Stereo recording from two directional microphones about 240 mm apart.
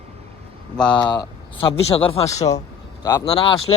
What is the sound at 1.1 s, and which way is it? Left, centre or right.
Speech, left.